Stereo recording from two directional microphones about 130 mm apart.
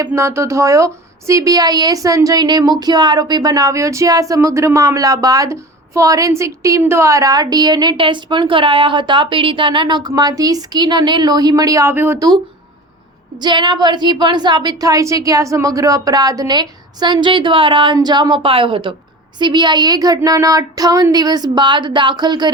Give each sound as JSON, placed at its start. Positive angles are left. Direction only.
{"t": 0.1, "sound": "a woman's voice", "side_deg": -20}
{"t": 13.4, "sound": "a woman's voice", "side_deg": -35}